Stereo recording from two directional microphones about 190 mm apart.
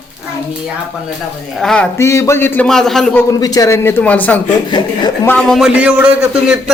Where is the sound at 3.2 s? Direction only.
20° left (ahead or behind).